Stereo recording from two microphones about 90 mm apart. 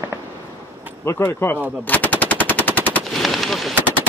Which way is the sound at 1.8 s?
20° left (ahead or behind).